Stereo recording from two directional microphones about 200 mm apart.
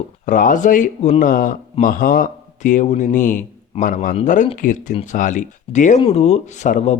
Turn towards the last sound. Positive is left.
turn(degrees=35)  # may be behind; listen again after turning